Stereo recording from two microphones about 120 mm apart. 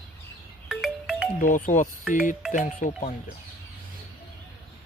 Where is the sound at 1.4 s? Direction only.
90° left.